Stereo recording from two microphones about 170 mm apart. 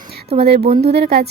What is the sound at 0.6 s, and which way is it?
Speech, 35° right (ahead or behind).